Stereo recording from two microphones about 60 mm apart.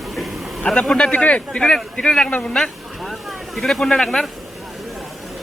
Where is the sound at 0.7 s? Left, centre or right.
Centre.